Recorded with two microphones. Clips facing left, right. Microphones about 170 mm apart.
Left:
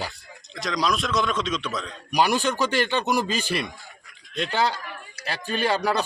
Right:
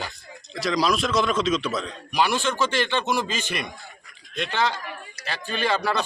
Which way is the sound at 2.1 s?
40° left (ahead or behind).